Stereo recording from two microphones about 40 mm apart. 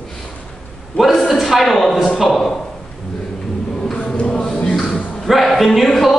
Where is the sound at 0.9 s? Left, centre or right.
Left.